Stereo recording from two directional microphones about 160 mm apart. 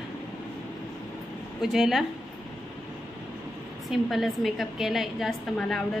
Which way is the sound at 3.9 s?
Centre (ahead or behind).